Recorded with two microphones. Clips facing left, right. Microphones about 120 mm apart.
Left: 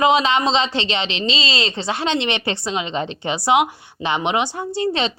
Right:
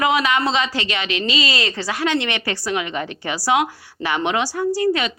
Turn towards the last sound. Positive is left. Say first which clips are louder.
# right 2 dB
turn(degrees=25)  # may be behind; listen again after turning